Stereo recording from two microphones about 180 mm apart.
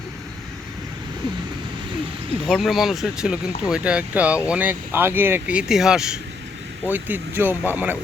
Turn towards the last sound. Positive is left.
turn(degrees=-10)  # may be behind; listen again after turning